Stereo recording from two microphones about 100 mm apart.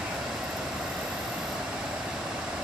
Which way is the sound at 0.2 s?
5° right (ahead or behind).